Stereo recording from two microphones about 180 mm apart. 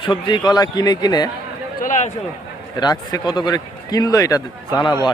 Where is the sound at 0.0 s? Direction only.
25° left (ahead or behind).